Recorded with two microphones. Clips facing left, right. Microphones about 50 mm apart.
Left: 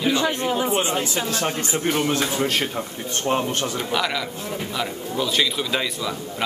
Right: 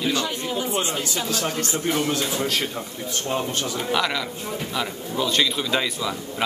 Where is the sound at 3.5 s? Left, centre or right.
Left.